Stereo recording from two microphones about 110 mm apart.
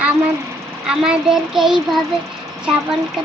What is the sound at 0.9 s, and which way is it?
Child singing, 5° right (ahead or behind).